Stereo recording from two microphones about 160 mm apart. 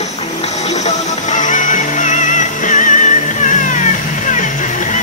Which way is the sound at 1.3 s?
55° left (ahead or behind).